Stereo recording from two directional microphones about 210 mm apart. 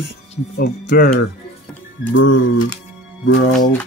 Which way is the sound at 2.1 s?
65° left (ahead or behind).